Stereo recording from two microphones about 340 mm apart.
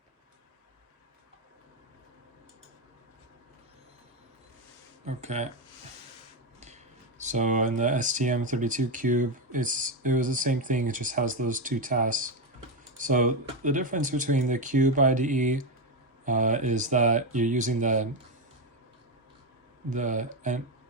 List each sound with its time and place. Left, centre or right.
5.0 s speech: centre
7.2 s speech: right
19.9 s speech: right